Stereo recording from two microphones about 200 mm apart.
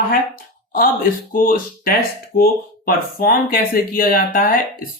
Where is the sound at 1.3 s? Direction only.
45° left (ahead or behind).